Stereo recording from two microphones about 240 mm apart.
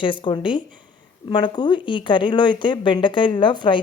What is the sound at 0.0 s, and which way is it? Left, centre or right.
Speech, left.